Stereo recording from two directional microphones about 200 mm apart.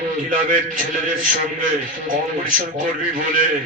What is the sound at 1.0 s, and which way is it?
Speech, 40° right (ahead or behind).